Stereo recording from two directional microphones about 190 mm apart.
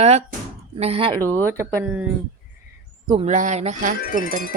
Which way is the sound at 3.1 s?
30° right (ahead or behind).